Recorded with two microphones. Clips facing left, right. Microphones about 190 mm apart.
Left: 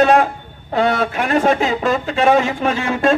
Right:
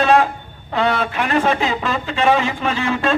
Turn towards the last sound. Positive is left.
turn(degrees=45)  # may be behind; listen again after turning